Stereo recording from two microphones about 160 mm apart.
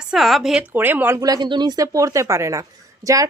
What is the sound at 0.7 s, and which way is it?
Speech, 10° right (ahead or behind).